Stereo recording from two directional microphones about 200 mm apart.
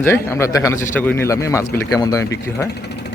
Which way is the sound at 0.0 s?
15° left (ahead or behind).